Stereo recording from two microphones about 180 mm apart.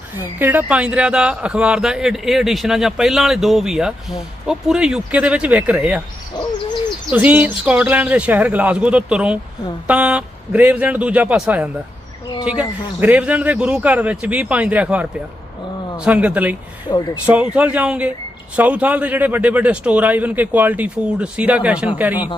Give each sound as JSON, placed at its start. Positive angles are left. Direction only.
{"t": 0.3, "sound": "speech", "side_deg": -10}
{"t": 7.1, "sound": "a man's voice", "side_deg": -10}
{"t": 16.9, "sound": "speech", "side_deg": 20}
{"t": 17.2, "sound": "a man's voice", "side_deg": -5}